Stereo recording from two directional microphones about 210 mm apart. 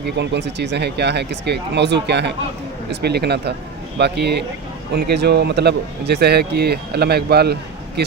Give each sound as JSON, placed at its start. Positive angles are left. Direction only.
{"t": 0.0, "sound": "speech", "side_deg": -55}